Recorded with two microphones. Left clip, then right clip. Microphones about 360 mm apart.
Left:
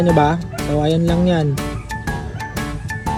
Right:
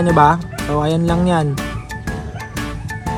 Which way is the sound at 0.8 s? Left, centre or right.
Right.